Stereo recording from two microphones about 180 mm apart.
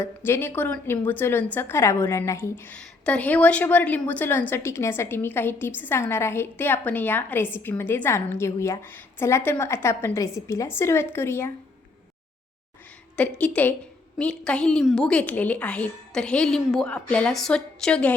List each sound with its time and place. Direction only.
0.3 s a woman's voice: 10° left (ahead or behind)
13.1 s a woman's voice: 10° left (ahead or behind)